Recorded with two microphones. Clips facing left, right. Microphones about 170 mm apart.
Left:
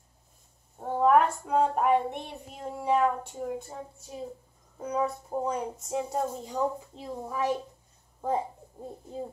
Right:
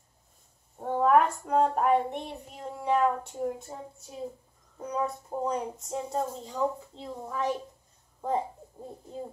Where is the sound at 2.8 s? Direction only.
Centre (ahead or behind).